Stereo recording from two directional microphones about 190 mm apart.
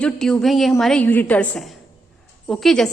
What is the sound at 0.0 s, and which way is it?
A woman's voice, 5° left (ahead or behind).